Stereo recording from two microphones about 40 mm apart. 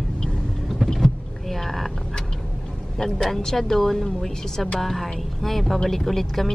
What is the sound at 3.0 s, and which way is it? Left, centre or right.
A woman's voice, centre.